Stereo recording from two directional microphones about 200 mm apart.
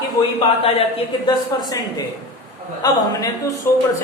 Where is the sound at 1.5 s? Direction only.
20° left (ahead or behind).